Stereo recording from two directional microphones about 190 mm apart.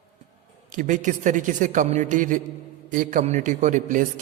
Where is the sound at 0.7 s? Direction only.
45° right (ahead or behind).